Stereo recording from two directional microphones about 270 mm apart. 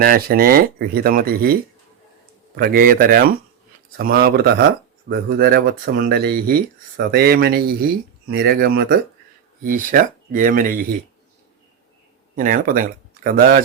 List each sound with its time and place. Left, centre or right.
0.0 s speech: right
2.6 s speech: right
12.4 s speech: right